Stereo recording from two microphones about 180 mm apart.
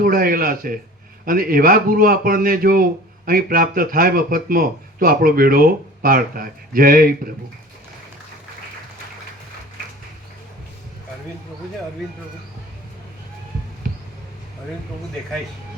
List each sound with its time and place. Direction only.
0.0 s a man's voice: 55° right (ahead or behind)
13.8 s music: 50° right (ahead or behind)